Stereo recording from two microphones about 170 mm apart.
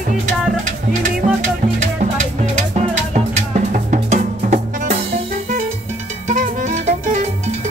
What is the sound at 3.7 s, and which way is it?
Music, 45° right (ahead or behind).